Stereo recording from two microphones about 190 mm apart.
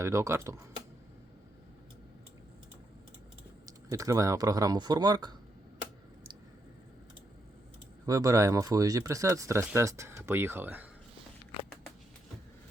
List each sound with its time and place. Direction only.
0.0 s speech: 15° right (ahead or behind)
3.7 s speech: 20° right (ahead or behind)
8.0 s speech: 15° right (ahead or behind)